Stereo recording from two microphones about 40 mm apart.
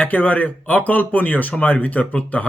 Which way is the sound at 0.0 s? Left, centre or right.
Left.